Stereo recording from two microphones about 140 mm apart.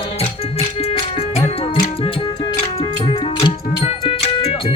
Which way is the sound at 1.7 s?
35° left (ahead or behind).